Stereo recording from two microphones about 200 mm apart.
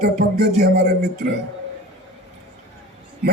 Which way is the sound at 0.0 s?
45° right (ahead or behind).